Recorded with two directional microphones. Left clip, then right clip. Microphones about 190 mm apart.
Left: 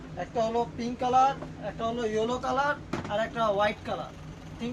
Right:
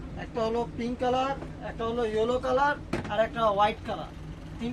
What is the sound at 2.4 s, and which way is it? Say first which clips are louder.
Vehicle: right 3 dB; 30° left (ahead or behind).